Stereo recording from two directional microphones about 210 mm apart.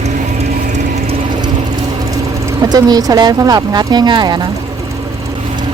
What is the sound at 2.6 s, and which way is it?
Speech, 20° right (ahead or behind).